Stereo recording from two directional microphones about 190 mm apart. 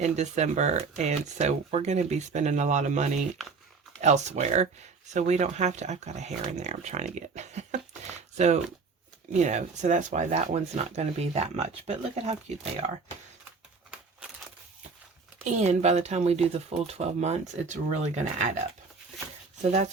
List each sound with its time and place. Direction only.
0.0 s speech: 35° right (ahead or behind)
15.4 s speech: 35° right (ahead or behind)